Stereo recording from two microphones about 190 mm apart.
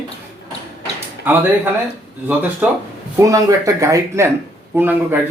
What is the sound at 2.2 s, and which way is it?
Speech, 10° right (ahead or behind).